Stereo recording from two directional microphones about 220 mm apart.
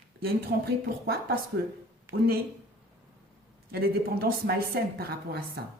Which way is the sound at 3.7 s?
45° right (ahead or behind).